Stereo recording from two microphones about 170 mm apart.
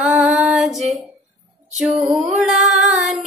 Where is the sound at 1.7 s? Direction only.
5° right (ahead or behind).